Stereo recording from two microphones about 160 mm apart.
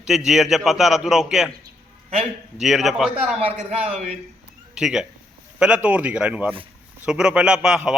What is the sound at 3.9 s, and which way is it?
Speech, 50° right (ahead or behind).